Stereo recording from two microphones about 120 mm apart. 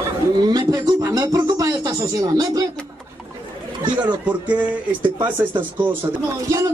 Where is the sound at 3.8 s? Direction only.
35° right (ahead or behind).